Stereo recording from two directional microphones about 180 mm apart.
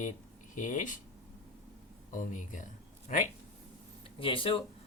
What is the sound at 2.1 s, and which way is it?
Speech, 45° left (ahead or behind).